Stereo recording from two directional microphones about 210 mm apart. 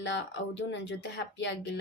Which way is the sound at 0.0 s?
60° left (ahead or behind).